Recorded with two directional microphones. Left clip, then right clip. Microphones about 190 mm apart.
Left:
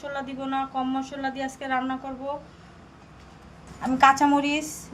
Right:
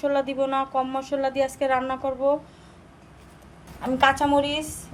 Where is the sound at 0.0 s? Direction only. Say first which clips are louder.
Right 9 dB; 50° right (ahead or behind).